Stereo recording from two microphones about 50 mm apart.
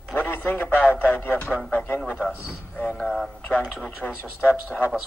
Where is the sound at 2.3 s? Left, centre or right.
Centre.